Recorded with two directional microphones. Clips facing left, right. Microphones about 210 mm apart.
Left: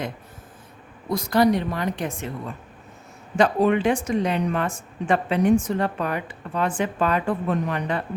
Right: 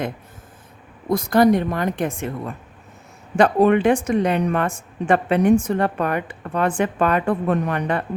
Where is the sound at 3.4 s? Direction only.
60° right (ahead or behind).